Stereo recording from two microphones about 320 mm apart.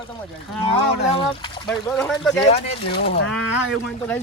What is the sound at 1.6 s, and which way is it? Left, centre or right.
Speech, centre.